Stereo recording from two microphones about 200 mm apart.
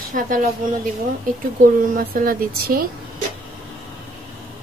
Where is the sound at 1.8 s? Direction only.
45° right (ahead or behind).